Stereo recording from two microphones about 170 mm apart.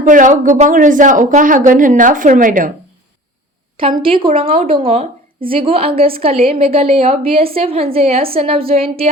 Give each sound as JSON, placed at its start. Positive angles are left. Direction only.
{"t": 0.1, "sound": "a woman's voice", "side_deg": -50}
{"t": 4.0, "sound": "a woman's voice", "side_deg": -30}